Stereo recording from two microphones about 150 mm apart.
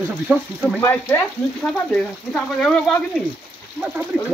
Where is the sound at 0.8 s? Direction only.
15° left (ahead or behind).